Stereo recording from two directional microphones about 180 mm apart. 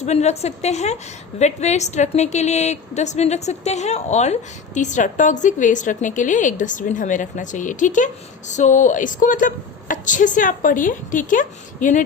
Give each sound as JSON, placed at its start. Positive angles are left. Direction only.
{"t": 0.0, "sound": "a woman's voice", "side_deg": 40}